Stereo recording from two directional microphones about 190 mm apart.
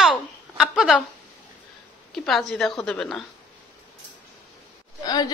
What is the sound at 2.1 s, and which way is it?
A woman's voice, centre (ahead or behind).